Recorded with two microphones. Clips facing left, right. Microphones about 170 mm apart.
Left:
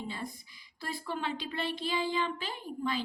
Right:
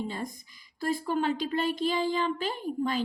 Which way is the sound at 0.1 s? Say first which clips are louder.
Right 4 dB; 45° right (ahead or behind).